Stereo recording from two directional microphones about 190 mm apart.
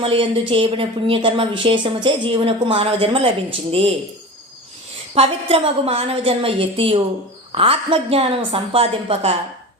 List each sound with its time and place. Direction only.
0.0 s speech: 30° right (ahead or behind)
5.1 s a woman's voice: 30° right (ahead or behind)